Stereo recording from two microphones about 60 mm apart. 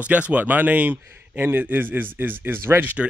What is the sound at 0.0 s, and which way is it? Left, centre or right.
Speech, right.